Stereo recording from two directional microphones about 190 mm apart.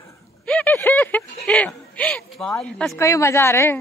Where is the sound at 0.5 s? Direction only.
10° left (ahead or behind).